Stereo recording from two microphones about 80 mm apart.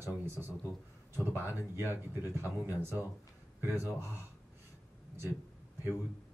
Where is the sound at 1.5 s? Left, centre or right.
Right.